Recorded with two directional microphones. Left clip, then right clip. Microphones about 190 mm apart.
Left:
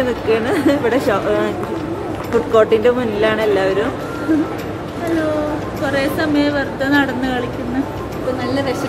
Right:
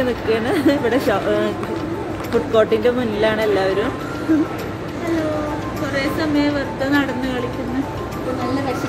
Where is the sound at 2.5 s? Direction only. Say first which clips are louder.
Left 3 dB; 15° right (ahead or behind).